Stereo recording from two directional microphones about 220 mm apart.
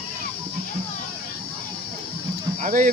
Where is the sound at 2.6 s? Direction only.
35° right (ahead or behind).